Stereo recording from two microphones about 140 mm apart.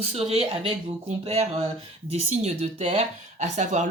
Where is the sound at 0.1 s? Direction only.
45° right (ahead or behind).